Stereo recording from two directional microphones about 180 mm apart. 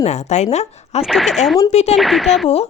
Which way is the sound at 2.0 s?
Centre (ahead or behind).